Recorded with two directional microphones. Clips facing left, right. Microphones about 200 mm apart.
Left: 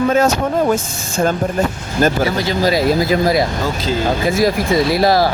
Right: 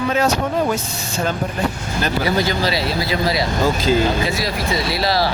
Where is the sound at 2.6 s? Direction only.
45° left (ahead or behind).